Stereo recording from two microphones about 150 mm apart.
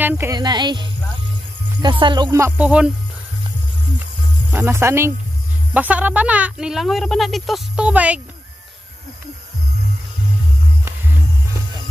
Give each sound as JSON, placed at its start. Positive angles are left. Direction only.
{"t": 0.0, "sound": "speech", "side_deg": -15}
{"t": 0.4, "sound": "speech", "side_deg": -30}
{"t": 2.3, "sound": "speech", "side_deg": -15}
{"t": 4.5, "sound": "speech", "side_deg": -15}